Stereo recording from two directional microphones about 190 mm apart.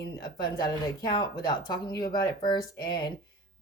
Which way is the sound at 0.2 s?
20° left (ahead or behind).